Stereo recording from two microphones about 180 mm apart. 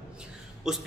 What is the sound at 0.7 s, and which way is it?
Speech, 5° right (ahead or behind).